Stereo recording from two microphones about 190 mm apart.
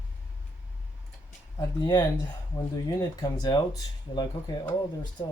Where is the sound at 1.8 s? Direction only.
20° left (ahead or behind).